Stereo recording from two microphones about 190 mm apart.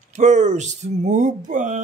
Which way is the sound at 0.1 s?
40° right (ahead or behind).